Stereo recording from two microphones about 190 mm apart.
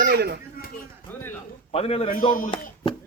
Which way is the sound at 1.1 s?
10° left (ahead or behind).